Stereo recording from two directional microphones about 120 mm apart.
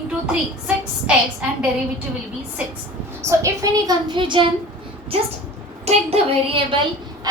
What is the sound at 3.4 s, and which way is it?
Speech, 25° right (ahead or behind).